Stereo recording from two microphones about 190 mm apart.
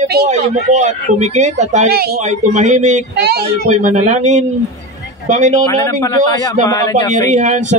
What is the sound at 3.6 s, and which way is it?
Speech, 40° right (ahead or behind).